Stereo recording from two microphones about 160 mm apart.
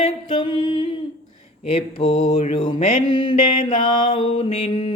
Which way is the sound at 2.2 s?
45° left (ahead or behind).